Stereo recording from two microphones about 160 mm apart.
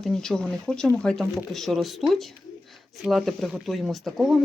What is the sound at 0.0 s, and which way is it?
Speech, 5° left (ahead or behind).